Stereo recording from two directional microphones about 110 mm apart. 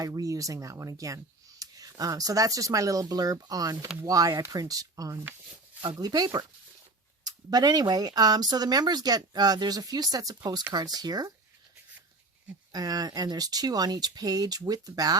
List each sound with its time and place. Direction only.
0.0 s speech: 30° right (ahead or behind)
12.7 s speech: 35° right (ahead or behind)